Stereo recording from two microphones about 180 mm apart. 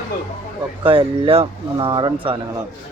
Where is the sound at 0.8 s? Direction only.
30° right (ahead or behind).